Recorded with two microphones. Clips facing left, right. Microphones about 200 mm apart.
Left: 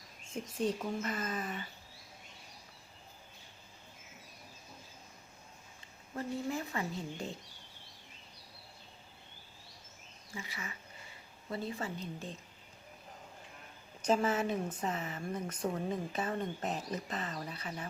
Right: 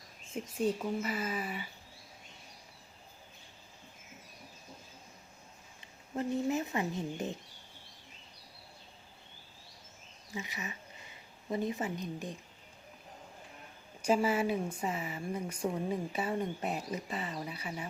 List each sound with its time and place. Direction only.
0.5 s speech: 10° right (ahead or behind)
6.1 s speech: 20° right (ahead or behind)
10.3 s speech: 20° right (ahead or behind)
14.0 s speech: 10° right (ahead or behind)